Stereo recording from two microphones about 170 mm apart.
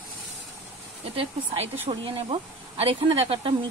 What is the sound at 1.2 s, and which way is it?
A woman's voice, 35° right (ahead or behind).